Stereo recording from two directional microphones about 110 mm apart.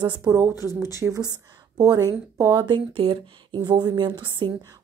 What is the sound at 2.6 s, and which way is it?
A woman's voice, 50° right (ahead or behind).